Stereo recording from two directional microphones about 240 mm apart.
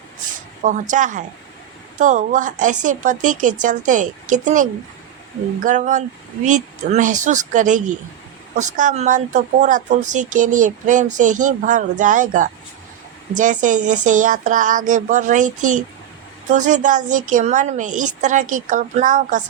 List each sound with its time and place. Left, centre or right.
0.6 s speech: right